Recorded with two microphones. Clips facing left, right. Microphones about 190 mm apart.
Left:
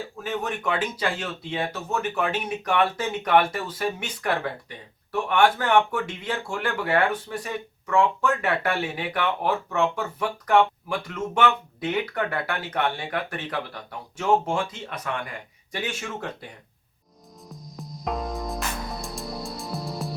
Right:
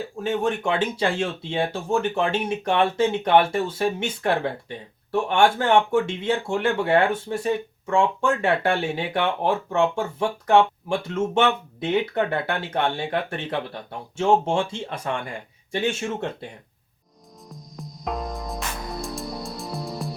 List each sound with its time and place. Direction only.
0.2 s speech: 25° right (ahead or behind)
17.5 s music: centre (ahead or behind)